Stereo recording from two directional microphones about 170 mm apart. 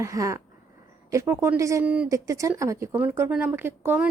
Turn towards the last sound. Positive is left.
turn(degrees=-10)  # may be behind; listen again after turning